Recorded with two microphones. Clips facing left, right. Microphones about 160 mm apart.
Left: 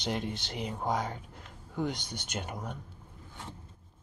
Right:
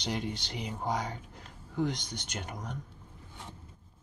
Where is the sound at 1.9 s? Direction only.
55° left (ahead or behind).